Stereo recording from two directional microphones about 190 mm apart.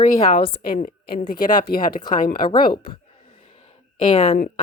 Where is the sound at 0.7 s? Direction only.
50° left (ahead or behind).